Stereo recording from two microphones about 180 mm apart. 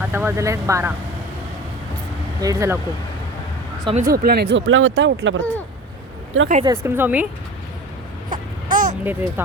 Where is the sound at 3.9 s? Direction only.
50° right (ahead or behind); by 5.4 s 90° right.